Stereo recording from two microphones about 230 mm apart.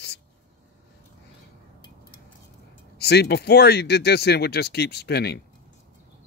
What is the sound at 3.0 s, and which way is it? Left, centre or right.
Speech, left.